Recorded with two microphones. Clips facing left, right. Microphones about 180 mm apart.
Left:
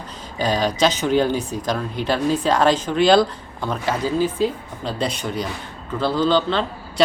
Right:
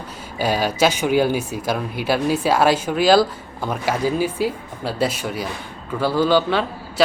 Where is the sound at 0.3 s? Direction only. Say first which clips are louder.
Even; 10° right (ahead or behind).